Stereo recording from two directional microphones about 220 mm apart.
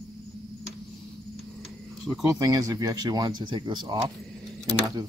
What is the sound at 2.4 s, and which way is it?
Speech, 15° right (ahead or behind).